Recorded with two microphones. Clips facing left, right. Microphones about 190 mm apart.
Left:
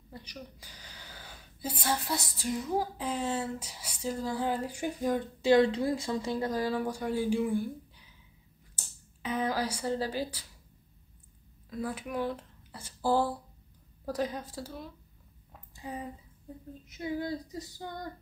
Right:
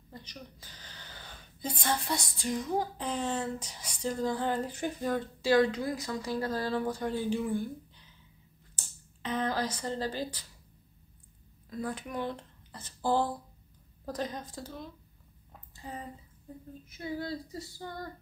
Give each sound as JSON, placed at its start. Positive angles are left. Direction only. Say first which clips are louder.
{"t": 0.1, "sound": "a woman's voice", "louder": "left 2 dB", "side_deg": 10}
{"t": 11.8, "sound": "a woman's voice", "louder": "left 2 dB", "side_deg": 5}